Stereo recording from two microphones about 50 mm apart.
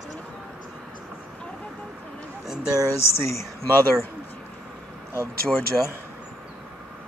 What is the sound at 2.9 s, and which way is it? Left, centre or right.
Speech, left.